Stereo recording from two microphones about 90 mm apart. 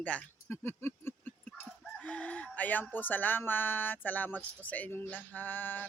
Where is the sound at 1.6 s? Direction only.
10° left (ahead or behind).